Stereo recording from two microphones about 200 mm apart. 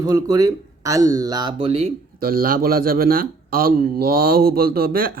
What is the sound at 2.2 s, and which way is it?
Speech, 45° right (ahead or behind).